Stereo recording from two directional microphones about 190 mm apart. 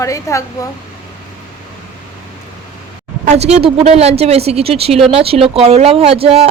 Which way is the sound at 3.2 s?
35° right (ahead or behind).